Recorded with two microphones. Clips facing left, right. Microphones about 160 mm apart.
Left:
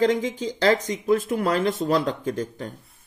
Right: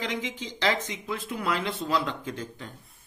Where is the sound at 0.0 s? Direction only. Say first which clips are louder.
Left 11 dB; 45° left (ahead or behind).